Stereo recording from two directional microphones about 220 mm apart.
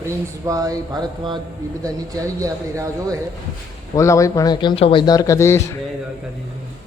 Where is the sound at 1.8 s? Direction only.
15° right (ahead or behind).